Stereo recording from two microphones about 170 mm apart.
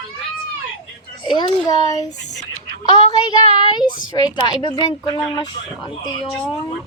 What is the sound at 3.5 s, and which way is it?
A woman's voice, 25° left (ahead or behind).